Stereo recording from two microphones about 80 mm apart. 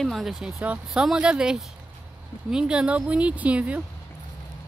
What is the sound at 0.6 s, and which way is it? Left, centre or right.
Speech, centre.